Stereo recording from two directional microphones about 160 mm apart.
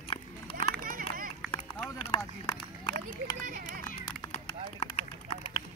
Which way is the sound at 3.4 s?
60° right (ahead or behind).